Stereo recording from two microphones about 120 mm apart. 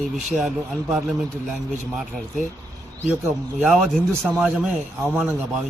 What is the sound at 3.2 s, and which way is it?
Speech, 15° right (ahead or behind).